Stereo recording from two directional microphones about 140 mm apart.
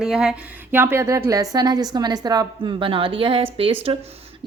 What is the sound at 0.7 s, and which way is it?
A woman's voice, 15° right (ahead or behind).